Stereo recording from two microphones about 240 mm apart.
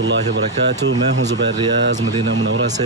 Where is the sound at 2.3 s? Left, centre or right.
Right.